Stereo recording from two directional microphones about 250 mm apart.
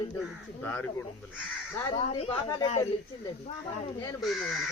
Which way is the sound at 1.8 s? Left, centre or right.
Centre.